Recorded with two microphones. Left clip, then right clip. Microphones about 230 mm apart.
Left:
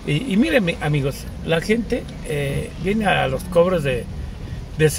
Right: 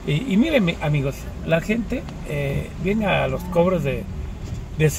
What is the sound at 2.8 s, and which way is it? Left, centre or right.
Speech, left.